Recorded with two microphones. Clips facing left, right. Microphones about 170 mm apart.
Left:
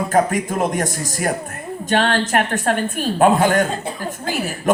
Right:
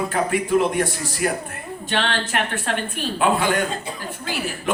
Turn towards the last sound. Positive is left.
turn(degrees=45)  # may be behind; listen again after turning